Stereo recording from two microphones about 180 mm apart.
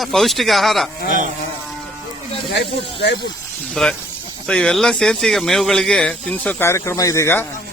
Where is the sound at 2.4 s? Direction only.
70° left (ahead or behind).